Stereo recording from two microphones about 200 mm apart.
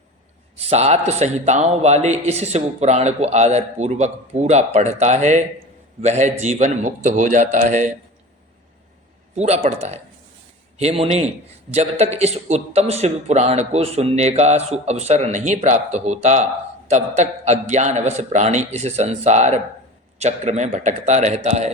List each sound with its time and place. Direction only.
0.5 s a man's voice: 30° right (ahead or behind)
9.3 s a man's voice: 35° right (ahead or behind)